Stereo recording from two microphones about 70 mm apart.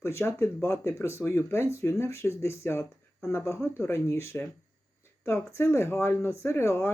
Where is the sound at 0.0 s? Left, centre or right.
Left.